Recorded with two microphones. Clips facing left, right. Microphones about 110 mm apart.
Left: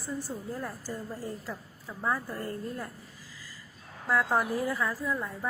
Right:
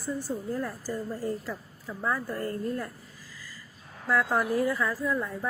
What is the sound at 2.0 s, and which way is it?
Speech, 10° left (ahead or behind).